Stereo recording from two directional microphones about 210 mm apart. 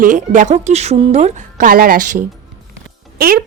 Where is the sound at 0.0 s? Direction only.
35° right (ahead or behind).